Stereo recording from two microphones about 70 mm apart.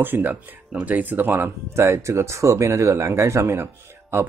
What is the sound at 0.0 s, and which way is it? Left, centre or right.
Speech, right.